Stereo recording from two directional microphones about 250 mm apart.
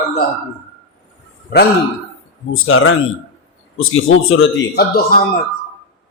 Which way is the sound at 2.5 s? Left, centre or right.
Left.